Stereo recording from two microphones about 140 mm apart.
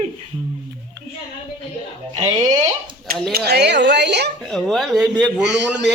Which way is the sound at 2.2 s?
25° right (ahead or behind).